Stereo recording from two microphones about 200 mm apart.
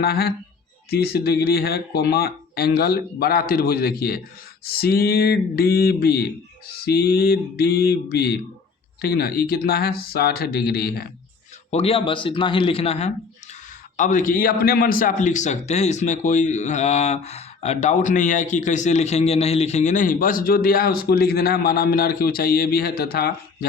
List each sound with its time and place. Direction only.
0.0 s speech: 50° left (ahead or behind)
11.7 s a man's voice: 30° left (ahead or behind); by 23.6 s 50° left (ahead or behind)